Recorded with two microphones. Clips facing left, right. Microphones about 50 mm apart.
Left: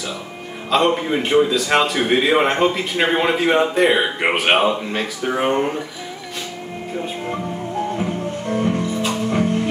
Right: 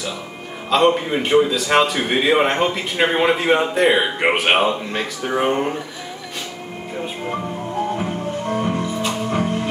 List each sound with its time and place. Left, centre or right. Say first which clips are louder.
0.7 s a man's voice: right 1 dB; centre
8.0 s music: even; right